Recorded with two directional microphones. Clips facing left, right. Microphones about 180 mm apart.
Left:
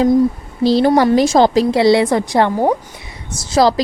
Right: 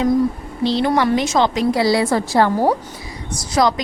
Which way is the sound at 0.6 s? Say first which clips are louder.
Left 5 dB; 40° left (ahead or behind).